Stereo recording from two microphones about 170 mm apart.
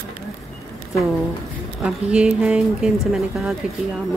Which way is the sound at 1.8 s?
5° right (ahead or behind).